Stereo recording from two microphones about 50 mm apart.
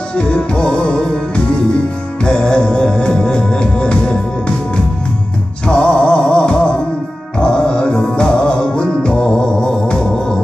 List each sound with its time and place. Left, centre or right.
0.1 s music: left
5.7 s music: left